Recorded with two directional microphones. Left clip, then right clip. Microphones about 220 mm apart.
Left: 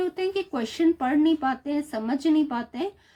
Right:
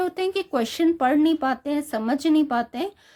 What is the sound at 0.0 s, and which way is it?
Speech, 50° right (ahead or behind).